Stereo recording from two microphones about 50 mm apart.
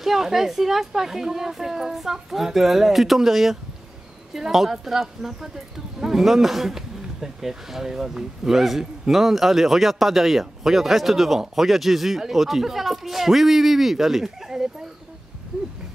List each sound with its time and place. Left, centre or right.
0.0 s a man's voice: centre